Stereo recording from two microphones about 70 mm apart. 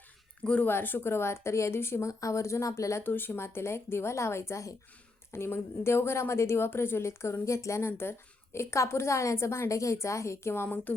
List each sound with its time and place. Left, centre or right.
0.4 s speech: centre
0.7 s speech: left
3.0 s a woman's voice: left